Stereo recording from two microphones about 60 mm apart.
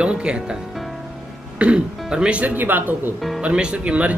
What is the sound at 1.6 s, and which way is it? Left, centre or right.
Speech, centre.